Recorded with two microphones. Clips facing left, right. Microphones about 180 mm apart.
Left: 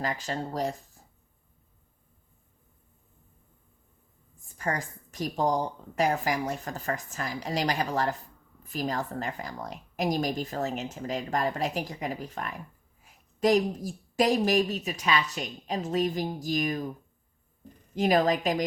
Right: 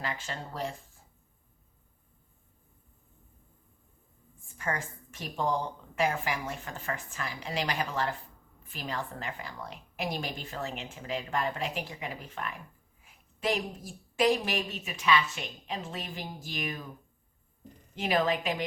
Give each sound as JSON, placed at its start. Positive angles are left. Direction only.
{"t": 0.0, "sound": "a woman's voice", "side_deg": 40}
{"t": 4.5, "sound": "a woman's voice", "side_deg": 40}
{"t": 17.9, "sound": "a woman's voice", "side_deg": 40}